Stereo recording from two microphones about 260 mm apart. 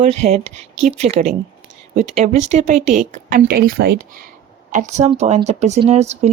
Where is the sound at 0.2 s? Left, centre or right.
Right.